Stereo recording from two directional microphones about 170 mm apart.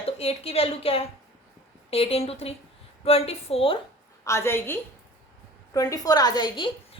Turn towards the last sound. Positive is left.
turn(degrees=30)  # may be behind; listen again after turning